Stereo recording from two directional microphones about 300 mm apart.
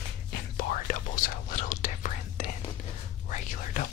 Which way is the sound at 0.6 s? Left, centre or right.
Left.